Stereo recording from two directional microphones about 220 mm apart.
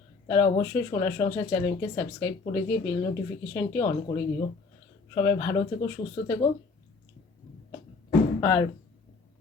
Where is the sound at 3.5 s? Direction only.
10° left (ahead or behind).